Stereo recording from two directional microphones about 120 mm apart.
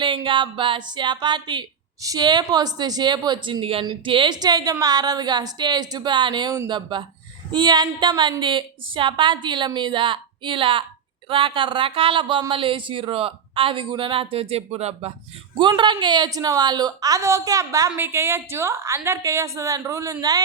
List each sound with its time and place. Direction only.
0.0 s speech: 40° right (ahead or behind); by 15.1 s 60° right (ahead or behind)
15.8 s a woman's voice: 40° right (ahead or behind); by 20.1 s 25° right (ahead or behind)